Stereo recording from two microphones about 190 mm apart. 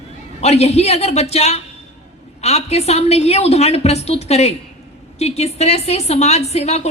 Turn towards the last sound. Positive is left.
turn(degrees=35)  # may be behind; listen again after turning